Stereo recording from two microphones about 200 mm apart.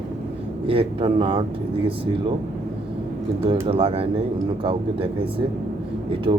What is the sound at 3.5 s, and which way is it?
Speech, 30° right (ahead or behind).